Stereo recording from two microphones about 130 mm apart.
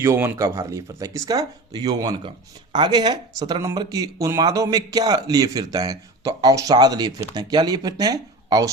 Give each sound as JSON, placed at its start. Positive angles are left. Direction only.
{"t": 0.0, "sound": "a man's voice", "side_deg": -20}